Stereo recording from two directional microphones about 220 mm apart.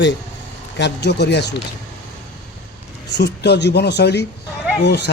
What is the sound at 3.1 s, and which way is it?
A man's voice, 50° left (ahead or behind).